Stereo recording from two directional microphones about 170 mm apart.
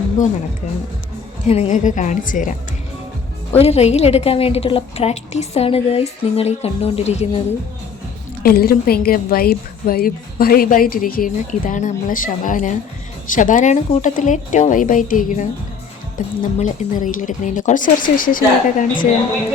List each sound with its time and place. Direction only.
1.5 s a woman's voice: 40° left (ahead or behind)
3.5 s a woman's voice: 40° left (ahead or behind)
8.4 s a woman's voice: 60° left (ahead or behind)